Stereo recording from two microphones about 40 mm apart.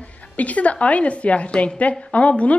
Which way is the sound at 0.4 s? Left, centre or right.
Left.